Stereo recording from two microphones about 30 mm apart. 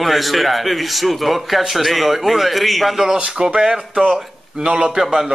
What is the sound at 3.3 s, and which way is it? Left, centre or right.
Speech, right.